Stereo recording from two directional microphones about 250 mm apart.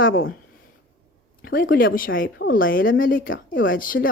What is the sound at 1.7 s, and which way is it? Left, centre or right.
Speech, left.